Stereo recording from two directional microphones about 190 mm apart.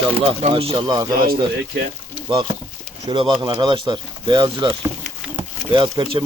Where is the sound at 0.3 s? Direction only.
30° right (ahead or behind).